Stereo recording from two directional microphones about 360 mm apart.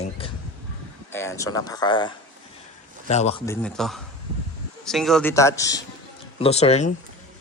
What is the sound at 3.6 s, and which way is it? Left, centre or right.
A man's voice, centre.